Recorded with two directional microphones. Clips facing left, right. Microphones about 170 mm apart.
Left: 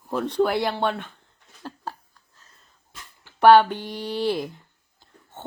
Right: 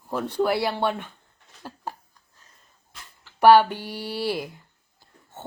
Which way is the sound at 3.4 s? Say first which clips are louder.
Left 1 dB; 10° right (ahead or behind).